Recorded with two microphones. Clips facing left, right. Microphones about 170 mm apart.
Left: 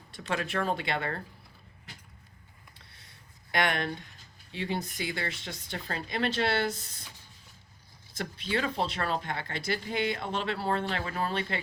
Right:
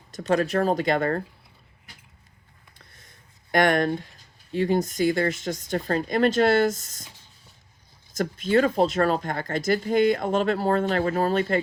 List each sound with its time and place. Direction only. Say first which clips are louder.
0.1 s speech: right 10 dB; 40° right (ahead or behind)
2.9 s a sound: right 2 dB; 45° right (ahead or behind)
4.5 s speech: right 11 dB; 45° right (ahead or behind)
8.1 s speech: right 11 dB; 45° right (ahead or behind)